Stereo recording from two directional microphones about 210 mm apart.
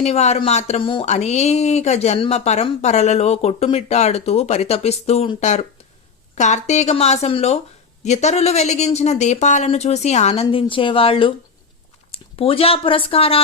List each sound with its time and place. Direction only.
0.0 s speech: 30° left (ahead or behind)